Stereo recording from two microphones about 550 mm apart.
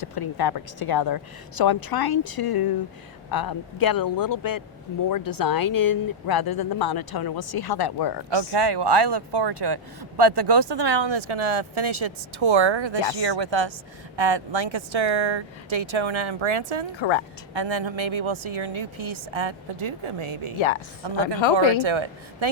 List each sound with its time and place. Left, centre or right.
0.0 s speech: left
8.3 s a woman's voice: right
17.0 s speech: left
17.5 s a woman's voice: right
21.0 s speech: right
21.4 s speech: left
21.8 s a woman's voice: right